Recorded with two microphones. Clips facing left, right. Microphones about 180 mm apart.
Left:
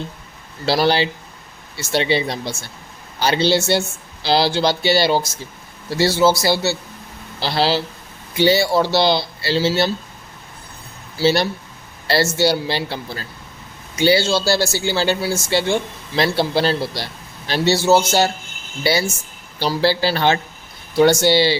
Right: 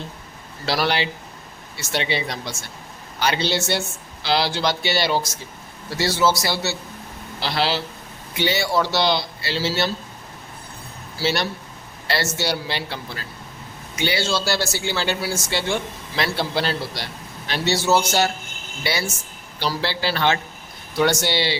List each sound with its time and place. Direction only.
0.6 s a man's voice: 30° left (ahead or behind)
11.2 s speech: 30° left (ahead or behind)